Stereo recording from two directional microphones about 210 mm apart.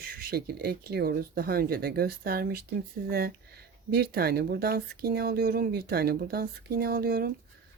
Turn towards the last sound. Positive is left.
turn(degrees=-45)  # may be behind; listen again after turning